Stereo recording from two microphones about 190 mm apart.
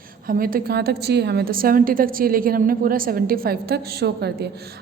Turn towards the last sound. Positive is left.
turn(degrees=-55)  # may be behind; listen again after turning